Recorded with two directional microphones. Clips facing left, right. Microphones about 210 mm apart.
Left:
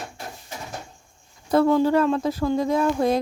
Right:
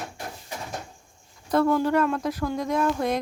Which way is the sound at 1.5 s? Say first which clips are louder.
Left 3 dB; 25° left (ahead or behind).